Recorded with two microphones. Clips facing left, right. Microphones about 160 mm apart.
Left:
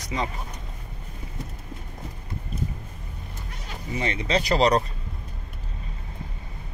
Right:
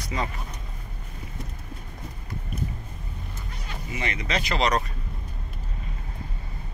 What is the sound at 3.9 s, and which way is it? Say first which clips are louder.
Speech: left 4 dB; 30° left (ahead or behind).